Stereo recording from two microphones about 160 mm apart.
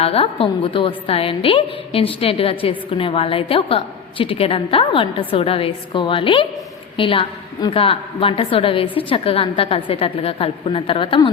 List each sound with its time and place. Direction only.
0.0 s a woman's voice: 35° left (ahead or behind)